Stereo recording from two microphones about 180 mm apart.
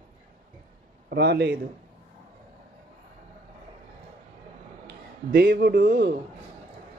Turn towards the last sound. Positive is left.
turn(degrees=-55)  # may be behind; listen again after turning